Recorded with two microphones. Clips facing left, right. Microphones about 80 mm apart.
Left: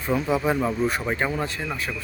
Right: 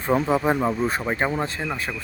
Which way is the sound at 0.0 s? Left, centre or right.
Right.